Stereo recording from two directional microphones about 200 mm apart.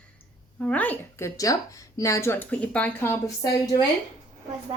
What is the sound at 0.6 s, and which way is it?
Speech, 5° left (ahead or behind).